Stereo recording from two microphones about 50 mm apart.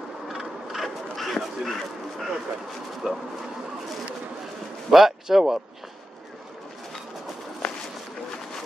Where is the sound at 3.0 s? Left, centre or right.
Centre.